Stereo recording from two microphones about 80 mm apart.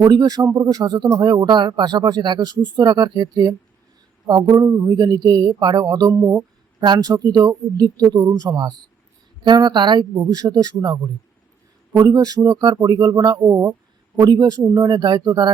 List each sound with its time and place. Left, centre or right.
0.0 s speech: right
0.4 s speech: right
1.2 s speech: right